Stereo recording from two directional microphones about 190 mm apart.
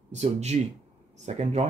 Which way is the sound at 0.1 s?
35° right (ahead or behind).